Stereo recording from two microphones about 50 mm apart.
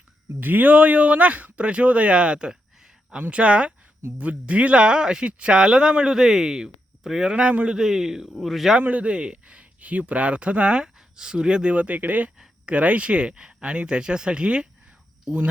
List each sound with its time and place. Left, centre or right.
0.3 s speech: right
7.8 s a man's voice: centre
8.8 s speech: right